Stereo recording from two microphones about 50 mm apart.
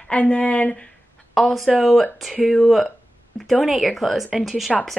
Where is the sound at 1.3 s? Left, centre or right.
Centre.